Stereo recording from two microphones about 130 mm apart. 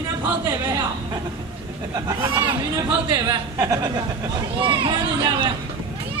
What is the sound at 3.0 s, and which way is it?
A man's voice, 35° right (ahead or behind).